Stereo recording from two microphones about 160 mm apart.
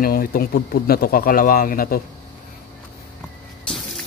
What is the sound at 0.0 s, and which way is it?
Speech, 65° left (ahead or behind).